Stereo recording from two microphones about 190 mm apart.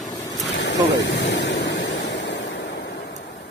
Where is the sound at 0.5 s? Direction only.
70° left (ahead or behind).